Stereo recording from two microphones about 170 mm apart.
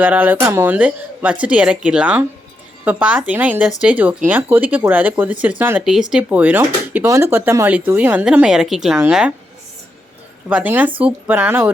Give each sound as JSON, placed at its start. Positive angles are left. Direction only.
{"t": 0.0, "sound": "speech", "side_deg": -10}
{"t": 10.5, "sound": "speech", "side_deg": -10}